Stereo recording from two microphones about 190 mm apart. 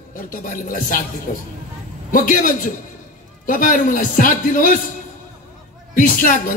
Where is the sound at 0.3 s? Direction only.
45° left (ahead or behind).